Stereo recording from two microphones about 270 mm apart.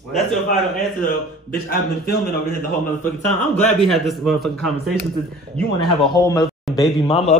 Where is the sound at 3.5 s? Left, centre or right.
Centre.